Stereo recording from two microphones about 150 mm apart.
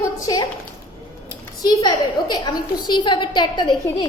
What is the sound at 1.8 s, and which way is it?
A woman's voice, 30° left (ahead or behind).